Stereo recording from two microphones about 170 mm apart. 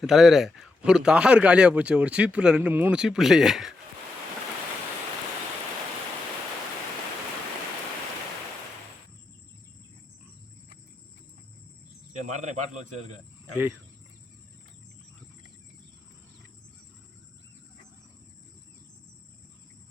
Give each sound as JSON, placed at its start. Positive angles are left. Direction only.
{"t": 0.0, "sound": "speech", "side_deg": 0}
{"t": 12.3, "sound": "speech", "side_deg": -45}